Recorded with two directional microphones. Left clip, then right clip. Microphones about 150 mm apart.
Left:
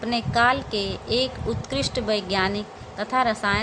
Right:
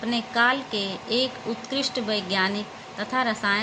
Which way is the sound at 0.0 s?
25° left (ahead or behind).